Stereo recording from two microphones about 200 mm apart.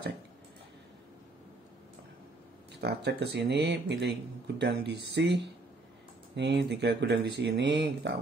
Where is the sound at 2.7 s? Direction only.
55° right (ahead or behind).